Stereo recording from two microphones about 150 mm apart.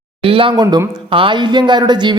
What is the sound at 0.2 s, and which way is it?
A man's voice, 35° right (ahead or behind).